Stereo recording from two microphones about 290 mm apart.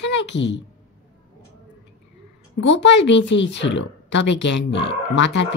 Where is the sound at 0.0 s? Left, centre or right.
Left.